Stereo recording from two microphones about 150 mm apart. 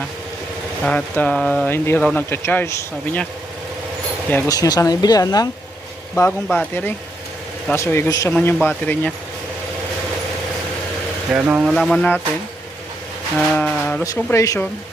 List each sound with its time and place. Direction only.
0.9 s speech: 10° left (ahead or behind)
4.4 s speech: 25° left (ahead or behind)
6.1 s speech: 15° left (ahead or behind)
8.3 s speech: 5° left (ahead or behind)
11.3 s speech: 10° right (ahead or behind)
11.7 s speech: 5° left (ahead or behind)
13.3 s music: 10° left (ahead or behind)
14.0 s speech: 20° left (ahead or behind)